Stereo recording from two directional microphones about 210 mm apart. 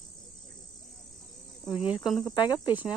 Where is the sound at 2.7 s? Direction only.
10° right (ahead or behind).